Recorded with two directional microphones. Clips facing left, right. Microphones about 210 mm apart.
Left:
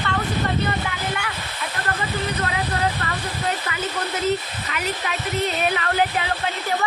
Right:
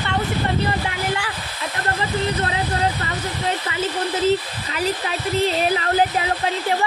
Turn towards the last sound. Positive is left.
turn(degrees=-30)  # may be behind; listen again after turning